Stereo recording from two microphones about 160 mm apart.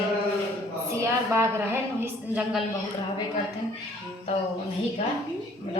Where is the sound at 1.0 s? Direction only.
15° right (ahead or behind).